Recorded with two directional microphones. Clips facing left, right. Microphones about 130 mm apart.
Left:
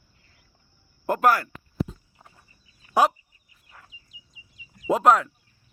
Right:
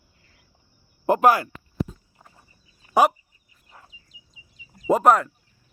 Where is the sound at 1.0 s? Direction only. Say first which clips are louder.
Right 3 dB; 15° right (ahead or behind).